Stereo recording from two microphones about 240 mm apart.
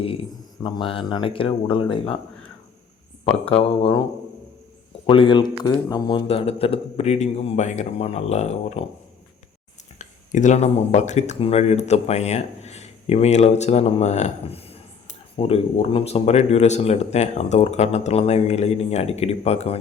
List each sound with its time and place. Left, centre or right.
0.6 s speech: centre
5.0 s speech: left
10.0 s speech: left